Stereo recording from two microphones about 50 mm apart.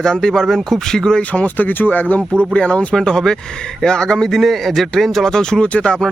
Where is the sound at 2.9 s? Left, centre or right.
Centre.